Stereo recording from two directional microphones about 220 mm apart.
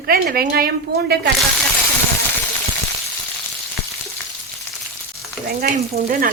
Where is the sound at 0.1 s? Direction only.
45° right (ahead or behind).